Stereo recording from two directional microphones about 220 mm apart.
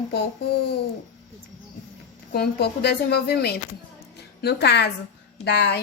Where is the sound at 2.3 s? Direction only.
45° left (ahead or behind).